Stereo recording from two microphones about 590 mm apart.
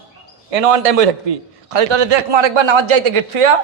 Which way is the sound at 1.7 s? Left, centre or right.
Right.